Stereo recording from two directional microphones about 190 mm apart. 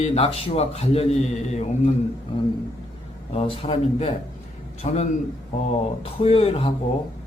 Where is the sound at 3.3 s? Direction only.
30° left (ahead or behind).